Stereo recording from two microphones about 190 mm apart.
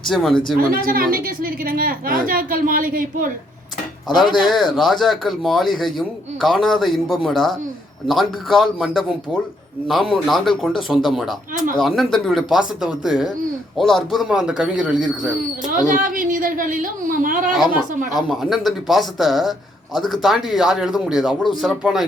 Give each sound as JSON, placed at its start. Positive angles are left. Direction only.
{"t": 0.1, "sound": "a man's voice", "side_deg": 0}
{"t": 0.9, "sound": "a woman's voice", "side_deg": -50}
{"t": 4.1, "sound": "a man's voice", "side_deg": 0}
{"t": 16.0, "sound": "a woman's voice", "side_deg": -45}
{"t": 18.3, "sound": "a man's voice", "side_deg": 0}